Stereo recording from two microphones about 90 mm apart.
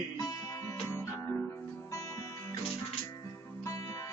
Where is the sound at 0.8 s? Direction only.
30° left (ahead or behind).